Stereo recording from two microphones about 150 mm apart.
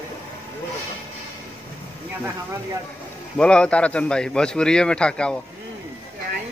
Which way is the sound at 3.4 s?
5° left (ahead or behind).